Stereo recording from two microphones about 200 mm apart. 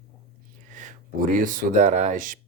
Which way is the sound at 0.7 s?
40° right (ahead or behind).